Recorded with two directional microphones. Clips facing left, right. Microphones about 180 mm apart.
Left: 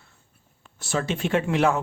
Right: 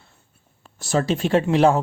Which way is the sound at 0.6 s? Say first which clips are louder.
Right 5 dB; 40° right (ahead or behind).